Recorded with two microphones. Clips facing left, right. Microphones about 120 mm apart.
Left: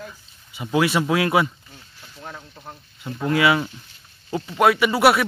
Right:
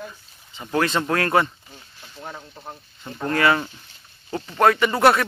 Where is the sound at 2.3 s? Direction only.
10° right (ahead or behind).